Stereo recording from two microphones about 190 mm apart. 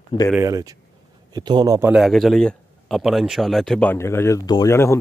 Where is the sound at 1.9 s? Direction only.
Centre (ahead or behind).